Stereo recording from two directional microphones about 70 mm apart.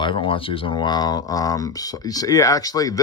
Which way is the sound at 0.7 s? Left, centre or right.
Left.